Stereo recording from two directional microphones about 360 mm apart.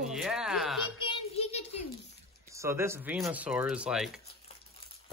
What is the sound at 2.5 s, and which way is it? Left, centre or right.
Speech, centre.